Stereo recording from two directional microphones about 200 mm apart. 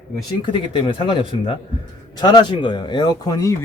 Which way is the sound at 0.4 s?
25° left (ahead or behind).